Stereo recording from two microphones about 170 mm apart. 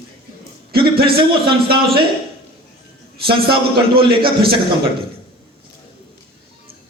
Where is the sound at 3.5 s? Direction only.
65° right (ahead or behind).